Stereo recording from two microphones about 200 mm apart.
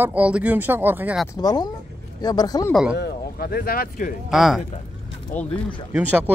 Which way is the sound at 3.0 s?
50° left (ahead or behind).